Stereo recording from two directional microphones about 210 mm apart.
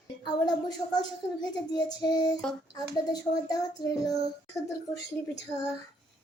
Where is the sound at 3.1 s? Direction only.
15° left (ahead or behind).